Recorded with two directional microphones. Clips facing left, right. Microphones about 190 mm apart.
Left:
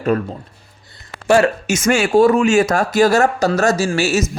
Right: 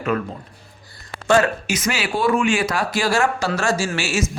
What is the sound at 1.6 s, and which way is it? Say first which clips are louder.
Speech: left 7 dB; 50° left (ahead or behind).